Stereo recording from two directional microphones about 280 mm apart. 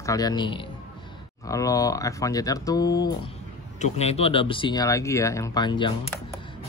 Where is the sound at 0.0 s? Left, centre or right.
Centre.